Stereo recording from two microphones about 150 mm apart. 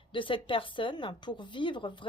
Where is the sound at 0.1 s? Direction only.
35° left (ahead or behind).